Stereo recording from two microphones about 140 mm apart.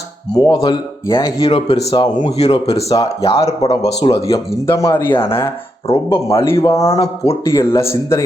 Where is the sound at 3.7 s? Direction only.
25° left (ahead or behind).